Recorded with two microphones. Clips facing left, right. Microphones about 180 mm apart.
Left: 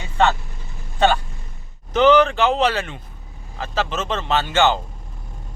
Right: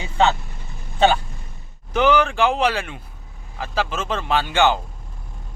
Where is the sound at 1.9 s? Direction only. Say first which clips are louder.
Left 4 dB; 10° right (ahead or behind).